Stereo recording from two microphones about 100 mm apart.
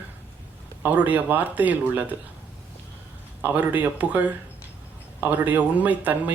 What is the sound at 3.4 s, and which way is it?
Speech, 20° right (ahead or behind).